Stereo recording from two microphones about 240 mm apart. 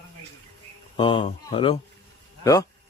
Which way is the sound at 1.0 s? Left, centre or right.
Left.